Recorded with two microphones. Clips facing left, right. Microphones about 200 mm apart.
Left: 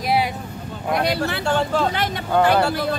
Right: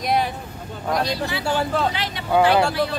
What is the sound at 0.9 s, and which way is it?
Speech, 65° left (ahead or behind).